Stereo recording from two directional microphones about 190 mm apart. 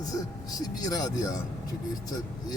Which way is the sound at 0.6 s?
20° left (ahead or behind).